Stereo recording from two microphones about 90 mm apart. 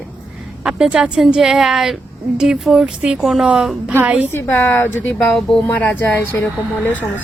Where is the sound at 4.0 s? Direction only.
20° right (ahead or behind).